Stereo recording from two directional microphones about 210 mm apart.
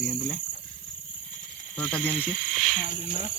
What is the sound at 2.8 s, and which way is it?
Speech, 35° left (ahead or behind).